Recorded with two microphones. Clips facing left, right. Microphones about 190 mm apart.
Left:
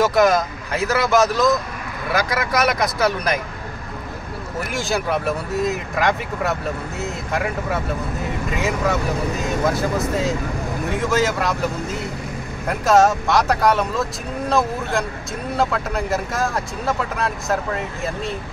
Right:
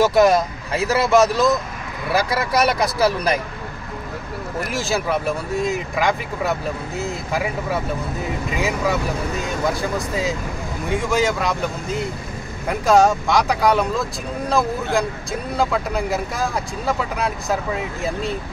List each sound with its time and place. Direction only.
0.0 s speech: 30° right (ahead or behind)
4.6 s speech: centre (ahead or behind)
12.6 s speech: centre (ahead or behind)